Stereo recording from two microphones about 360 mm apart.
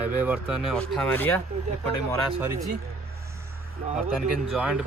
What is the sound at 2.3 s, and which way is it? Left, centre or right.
Speech, centre.